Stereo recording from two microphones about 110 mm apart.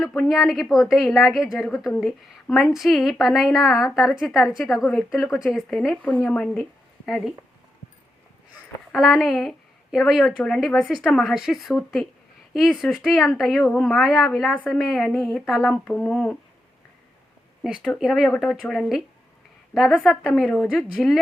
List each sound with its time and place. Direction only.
0.3 s a woman's voice: centre (ahead or behind)
8.9 s a woman's voice: 5° right (ahead or behind)
15.7 s speech: 10° left (ahead or behind)
17.6 s a woman's voice: 5° right (ahead or behind)